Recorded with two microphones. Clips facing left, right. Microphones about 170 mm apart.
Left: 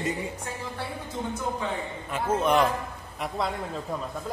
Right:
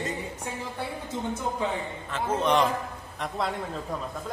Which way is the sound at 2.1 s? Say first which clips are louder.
Left 1 dB; 5° left (ahead or behind).